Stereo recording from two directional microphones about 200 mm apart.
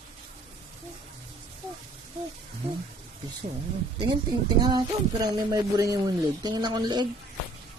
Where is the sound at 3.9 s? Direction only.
25° right (ahead or behind).